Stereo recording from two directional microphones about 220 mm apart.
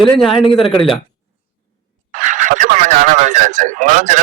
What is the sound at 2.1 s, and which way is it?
Radio, 35° right (ahead or behind).